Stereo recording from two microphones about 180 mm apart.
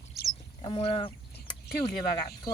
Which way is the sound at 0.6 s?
30° left (ahead or behind).